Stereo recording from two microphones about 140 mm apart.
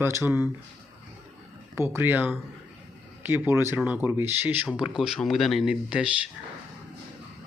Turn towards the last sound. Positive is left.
turn(degrees=-5)  # may be behind; listen again after turning